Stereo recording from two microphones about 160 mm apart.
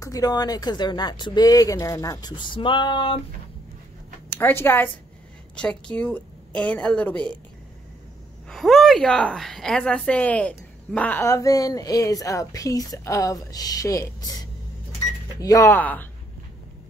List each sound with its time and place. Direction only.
0.0 s a woman's voice: 25° left (ahead or behind)
4.4 s a woman's voice: 15° left (ahead or behind)
8.5 s a woman's voice: centre (ahead or behind)